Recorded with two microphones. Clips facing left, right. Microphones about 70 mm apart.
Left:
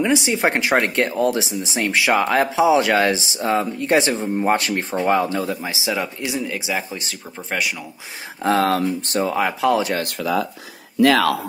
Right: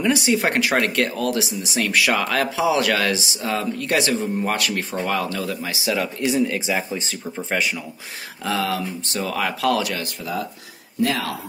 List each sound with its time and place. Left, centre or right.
0.0 s speech: centre
6.3 s speech: centre
8.5 s speech: left
9.2 s speech: left